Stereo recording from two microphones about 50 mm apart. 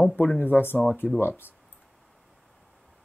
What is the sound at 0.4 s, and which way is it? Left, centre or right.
Speech, left.